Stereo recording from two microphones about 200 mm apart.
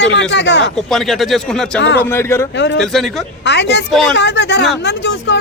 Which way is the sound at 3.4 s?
60° left (ahead or behind).